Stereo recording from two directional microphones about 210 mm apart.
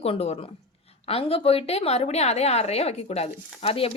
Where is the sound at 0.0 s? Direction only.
30° left (ahead or behind).